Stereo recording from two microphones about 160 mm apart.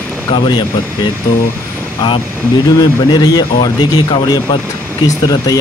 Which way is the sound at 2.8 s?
25° left (ahead or behind).